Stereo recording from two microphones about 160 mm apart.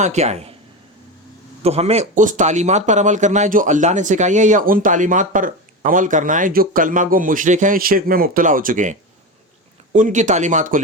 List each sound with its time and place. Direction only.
0.0 s speech: 45° right (ahead or behind)
1.6 s speech: 40° right (ahead or behind)